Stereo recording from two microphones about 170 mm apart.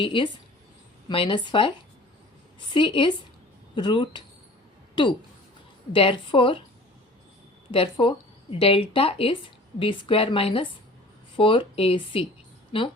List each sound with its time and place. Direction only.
0.0 s speech: 30° left (ahead or behind)
2.7 s speech: 30° left (ahead or behind)
7.7 s speech: 30° left (ahead or behind)